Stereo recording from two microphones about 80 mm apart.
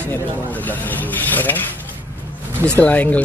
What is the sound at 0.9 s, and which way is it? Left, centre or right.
Rub, left.